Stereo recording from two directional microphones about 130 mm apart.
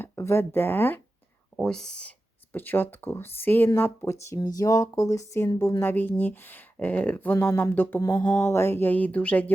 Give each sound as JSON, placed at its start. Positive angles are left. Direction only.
{"t": 0.0, "sound": "speech", "side_deg": 20}
{"t": 1.5, "sound": "speech", "side_deg": 5}
{"t": 8.0, "sound": "speech", "side_deg": 30}
{"t": 8.4, "sound": "speech", "side_deg": 20}